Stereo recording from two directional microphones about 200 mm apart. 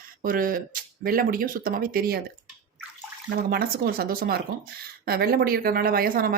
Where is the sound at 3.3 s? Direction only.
50° right (ahead or behind).